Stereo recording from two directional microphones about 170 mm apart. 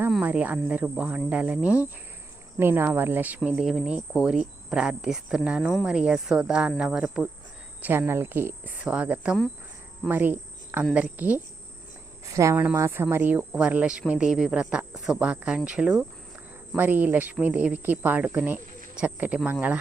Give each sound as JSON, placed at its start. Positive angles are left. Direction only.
{"t": 0.2, "sound": "speech", "side_deg": -10}